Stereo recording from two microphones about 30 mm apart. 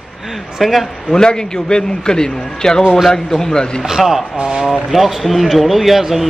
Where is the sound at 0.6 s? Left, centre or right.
Centre.